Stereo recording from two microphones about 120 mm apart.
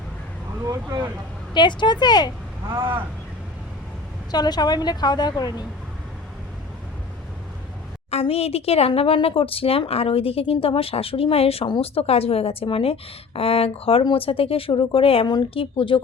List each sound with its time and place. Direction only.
0.6 s vehicle: 30° right (ahead or behind)
1.5 s a woman's voice: 40° left (ahead or behind)
4.3 s a woman's voice: 35° left (ahead or behind)
8.1 s a woman's voice: 55° left (ahead or behind)